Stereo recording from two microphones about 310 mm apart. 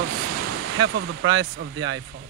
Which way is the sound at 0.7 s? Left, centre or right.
Right.